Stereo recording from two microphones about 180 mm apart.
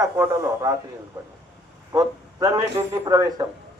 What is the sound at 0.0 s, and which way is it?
Speech, 15° right (ahead or behind).